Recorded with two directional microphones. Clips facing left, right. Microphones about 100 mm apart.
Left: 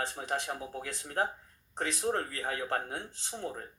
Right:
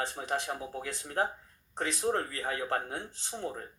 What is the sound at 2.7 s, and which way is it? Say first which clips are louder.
Speech: right 1 dB; 30° right (ahead or behind).